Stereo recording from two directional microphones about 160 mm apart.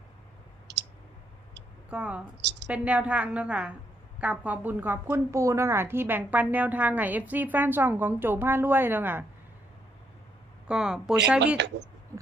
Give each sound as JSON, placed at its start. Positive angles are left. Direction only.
{"t": 0.7, "sound": "clicking", "side_deg": -90}
{"t": 1.9, "sound": "a woman's voice", "side_deg": -10}
{"t": 2.4, "sound": "a sound", "side_deg": -90}
{"t": 2.6, "sound": "a woman's voice", "side_deg": -10}
{"t": 10.7, "sound": "speech", "side_deg": -5}
{"t": 11.5, "sound": "speech", "side_deg": -90}